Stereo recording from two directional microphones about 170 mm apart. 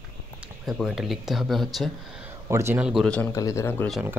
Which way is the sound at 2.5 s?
15° right (ahead or behind).